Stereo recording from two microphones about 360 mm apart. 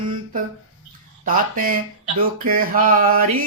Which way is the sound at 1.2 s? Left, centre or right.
Right.